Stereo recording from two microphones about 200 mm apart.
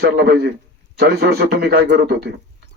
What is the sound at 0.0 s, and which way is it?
A man's voice, 55° right (ahead or behind).